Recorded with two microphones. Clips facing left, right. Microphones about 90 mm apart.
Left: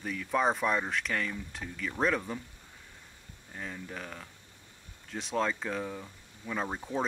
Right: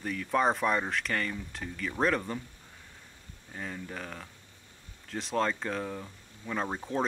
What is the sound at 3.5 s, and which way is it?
Speech, centre (ahead or behind).